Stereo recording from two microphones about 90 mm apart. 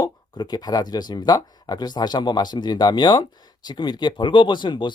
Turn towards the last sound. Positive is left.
turn(degrees=60)  # may be behind; listen again after turning